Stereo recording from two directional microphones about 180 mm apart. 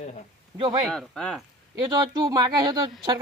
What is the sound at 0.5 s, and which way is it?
Speech, 25° right (ahead or behind).